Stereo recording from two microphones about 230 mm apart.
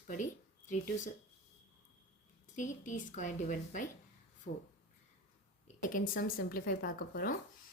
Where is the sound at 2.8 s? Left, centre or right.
Left.